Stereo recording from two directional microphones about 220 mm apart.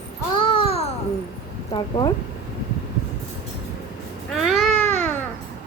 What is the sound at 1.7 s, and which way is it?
Speech, 20° left (ahead or behind).